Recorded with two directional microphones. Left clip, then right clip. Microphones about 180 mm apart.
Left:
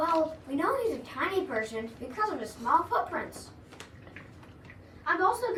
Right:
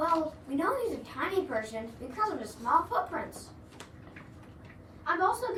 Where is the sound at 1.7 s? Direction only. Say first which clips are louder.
Left 2 dB; 25° right (ahead or behind).